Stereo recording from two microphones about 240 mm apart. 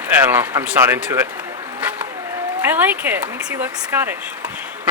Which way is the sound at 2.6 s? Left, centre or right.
Centre.